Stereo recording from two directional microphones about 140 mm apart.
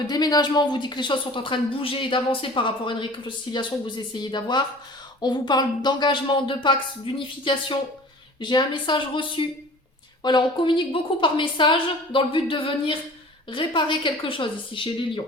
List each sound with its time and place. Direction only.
0.1 s speech: 30° left (ahead or behind)